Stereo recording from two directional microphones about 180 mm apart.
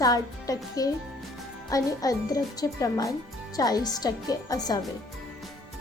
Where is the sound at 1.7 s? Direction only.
20° left (ahead or behind).